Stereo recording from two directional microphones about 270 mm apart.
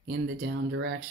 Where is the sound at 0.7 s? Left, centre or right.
Right.